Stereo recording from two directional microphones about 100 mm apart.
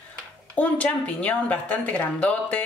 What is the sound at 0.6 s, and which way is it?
A woman's voice, 15° left (ahead or behind).